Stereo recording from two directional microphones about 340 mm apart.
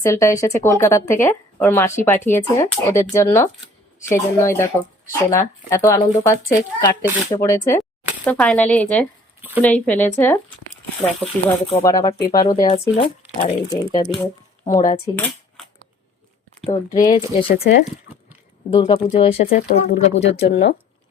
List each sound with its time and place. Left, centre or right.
0.0 s speech: centre
16.6 s speech: centre
18.7 s speech: centre